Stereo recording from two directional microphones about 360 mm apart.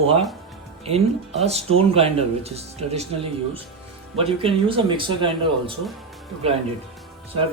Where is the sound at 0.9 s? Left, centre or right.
Centre.